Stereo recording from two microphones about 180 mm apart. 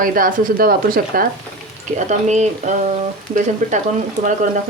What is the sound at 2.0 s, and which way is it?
Speech, 40° right (ahead or behind).